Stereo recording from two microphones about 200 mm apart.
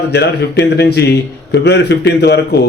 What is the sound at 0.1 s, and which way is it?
Speech, 55° left (ahead or behind).